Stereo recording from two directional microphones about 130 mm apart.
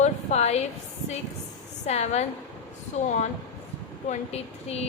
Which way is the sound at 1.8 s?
55° left (ahead or behind).